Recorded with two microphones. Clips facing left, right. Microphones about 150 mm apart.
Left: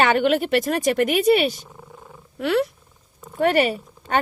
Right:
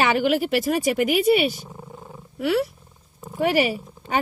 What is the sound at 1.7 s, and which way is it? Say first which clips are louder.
Purr: right 3 dB; 20° right (ahead or behind).